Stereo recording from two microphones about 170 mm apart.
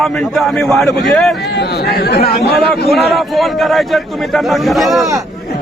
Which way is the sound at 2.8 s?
Centre (ahead or behind).